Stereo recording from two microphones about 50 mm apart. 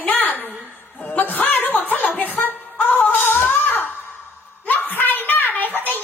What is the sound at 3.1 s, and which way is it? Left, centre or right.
Wail, left.